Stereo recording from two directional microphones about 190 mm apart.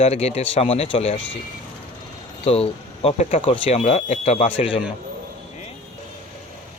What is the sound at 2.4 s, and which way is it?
A man's voice, 30° left (ahead or behind).